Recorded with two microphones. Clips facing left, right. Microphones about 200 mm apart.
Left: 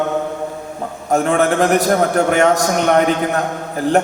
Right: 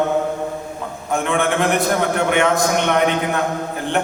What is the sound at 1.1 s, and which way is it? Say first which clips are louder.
A man's voice: left 4 dB; 40° left (ahead or behind).